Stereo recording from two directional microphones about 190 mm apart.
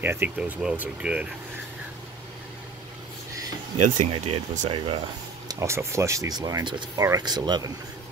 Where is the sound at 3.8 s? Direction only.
35° right (ahead or behind).